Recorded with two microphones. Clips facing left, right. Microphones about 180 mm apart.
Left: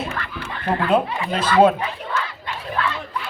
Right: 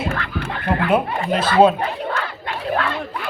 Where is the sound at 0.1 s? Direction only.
55° right (ahead or behind).